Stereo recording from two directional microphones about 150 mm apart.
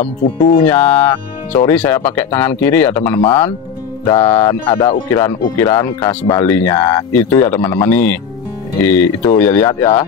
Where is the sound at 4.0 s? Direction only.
25° left (ahead or behind).